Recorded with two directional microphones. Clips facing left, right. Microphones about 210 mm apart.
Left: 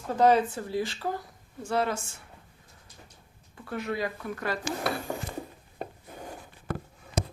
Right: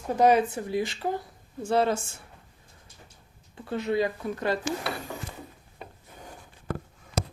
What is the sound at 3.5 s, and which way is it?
Speech, 25° right (ahead or behind).